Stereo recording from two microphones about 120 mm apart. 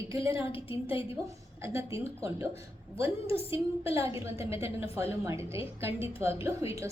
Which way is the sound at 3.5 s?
25° right (ahead or behind).